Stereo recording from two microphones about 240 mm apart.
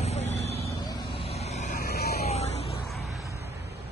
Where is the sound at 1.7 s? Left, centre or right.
Left.